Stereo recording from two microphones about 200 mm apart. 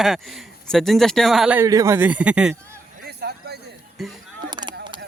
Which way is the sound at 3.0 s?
55° right (ahead or behind).